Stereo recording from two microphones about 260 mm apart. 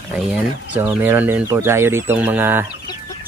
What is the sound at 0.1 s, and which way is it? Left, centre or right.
Speech, centre.